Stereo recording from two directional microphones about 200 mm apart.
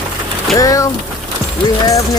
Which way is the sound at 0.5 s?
15° left (ahead or behind).